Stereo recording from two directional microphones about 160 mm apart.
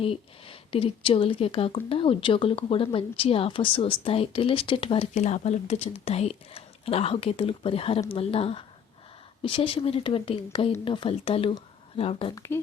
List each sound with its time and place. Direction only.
0.0 s a woman's voice: 35° left (ahead or behind)
12.3 s speech: 15° left (ahead or behind)